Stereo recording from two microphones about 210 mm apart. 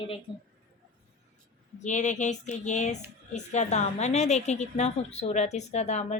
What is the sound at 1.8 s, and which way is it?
A woman's voice, 35° left (ahead or behind).